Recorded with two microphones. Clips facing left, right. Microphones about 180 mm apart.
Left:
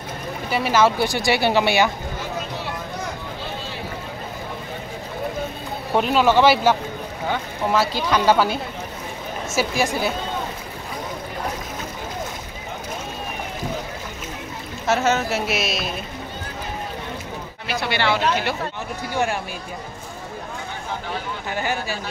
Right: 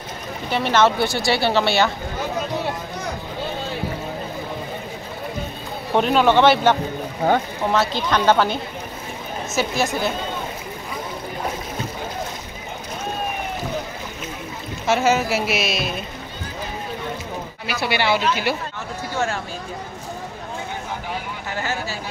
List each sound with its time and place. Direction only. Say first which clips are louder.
0.5 s speech: right 1 dB; 5° left (ahead or behind)
5.9 s speech: right 1 dB; 5° left (ahead or behind)
7.2 s speech: right 7 dB; 45° right (ahead or behind)
7.9 s speech: even; 5° left (ahead or behind)
9.6 s speech: even; 10° left (ahead or behind)
14.9 s speech: right 2 dB; centre (ahead or behind)
17.6 s speech: right 1 dB; 10° right (ahead or behind)
19.1 s speech: left 1 dB; 15° left (ahead or behind)
21.5 s speech: left 1 dB; 15° left (ahead or behind)